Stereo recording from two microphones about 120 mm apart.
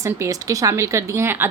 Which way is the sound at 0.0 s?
25° right (ahead or behind).